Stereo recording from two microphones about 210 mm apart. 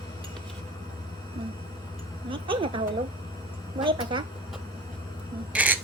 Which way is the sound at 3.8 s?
25° right (ahead or behind).